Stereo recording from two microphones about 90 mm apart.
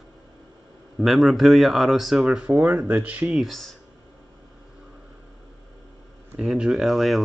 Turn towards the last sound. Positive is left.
turn(degrees=0)  # may be behind; listen again after turning